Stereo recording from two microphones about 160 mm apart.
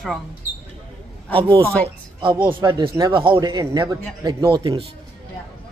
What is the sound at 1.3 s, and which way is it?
A man's voice, 30° right (ahead or behind).